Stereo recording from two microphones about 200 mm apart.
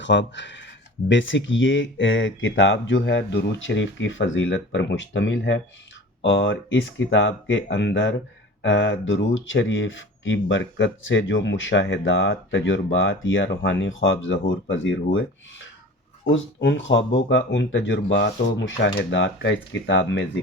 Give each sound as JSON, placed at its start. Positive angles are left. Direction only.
{"t": 0.0, "sound": "speech", "side_deg": 65}